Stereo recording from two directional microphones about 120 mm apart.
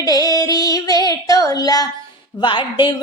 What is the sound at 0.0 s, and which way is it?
Child singing, 30° left (ahead or behind).